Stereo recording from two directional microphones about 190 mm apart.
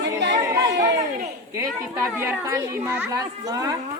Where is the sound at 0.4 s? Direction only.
20° right (ahead or behind).